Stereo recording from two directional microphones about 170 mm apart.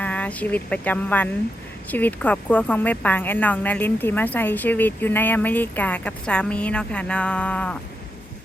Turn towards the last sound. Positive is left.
turn(degrees=10)  # may be behind; listen again after turning